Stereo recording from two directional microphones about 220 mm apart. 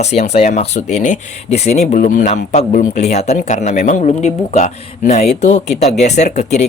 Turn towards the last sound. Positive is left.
turn(degrees=30)  # may be behind; listen again after turning